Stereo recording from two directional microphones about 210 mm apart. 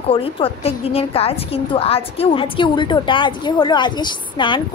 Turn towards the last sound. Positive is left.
turn(degrees=25)  # may be behind; listen again after turning